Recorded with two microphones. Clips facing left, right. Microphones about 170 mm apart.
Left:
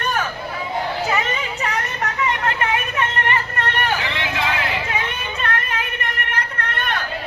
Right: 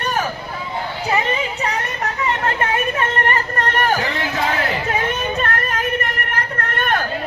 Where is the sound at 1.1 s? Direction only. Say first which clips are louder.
Right 3 dB; 30° right (ahead or behind).